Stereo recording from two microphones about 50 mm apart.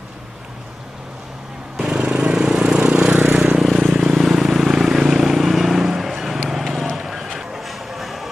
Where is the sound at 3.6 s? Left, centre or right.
Centre.